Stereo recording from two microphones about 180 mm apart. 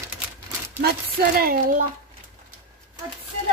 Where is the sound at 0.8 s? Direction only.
60° right (ahead or behind).